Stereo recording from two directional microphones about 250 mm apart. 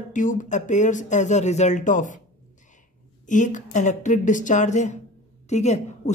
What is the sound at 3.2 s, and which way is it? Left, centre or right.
A woman's voice, left.